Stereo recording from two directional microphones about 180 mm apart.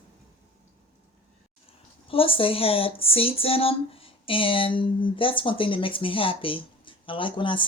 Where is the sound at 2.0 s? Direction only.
30° left (ahead or behind).